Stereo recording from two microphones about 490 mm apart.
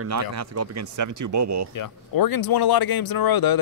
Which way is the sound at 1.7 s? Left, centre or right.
Left.